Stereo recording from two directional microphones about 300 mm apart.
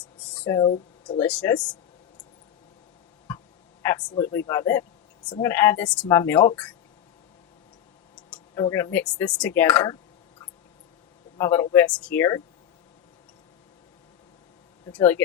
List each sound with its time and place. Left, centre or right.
0.0 s a sound: centre
0.7 s speech: left
1.2 s speech: centre
3.8 s speech: centre
8.1 s clicking: centre
8.6 s speech: centre
11.3 s speech: centre
14.8 s speech: centre